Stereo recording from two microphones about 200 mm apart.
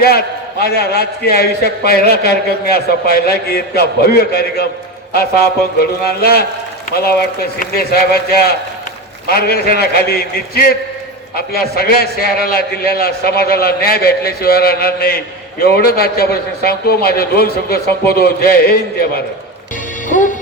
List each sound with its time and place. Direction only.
0.6 s a man's voice: 50° left (ahead or behind)
20.1 s music: 40° left (ahead or behind)